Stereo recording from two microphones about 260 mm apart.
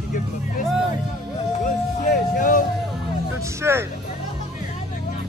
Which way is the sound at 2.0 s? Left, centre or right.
Left.